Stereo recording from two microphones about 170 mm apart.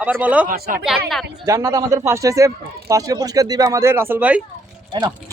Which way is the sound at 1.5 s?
15° right (ahead or behind).